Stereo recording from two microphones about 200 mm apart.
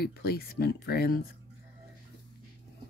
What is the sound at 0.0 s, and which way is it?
Speech, 50° left (ahead or behind).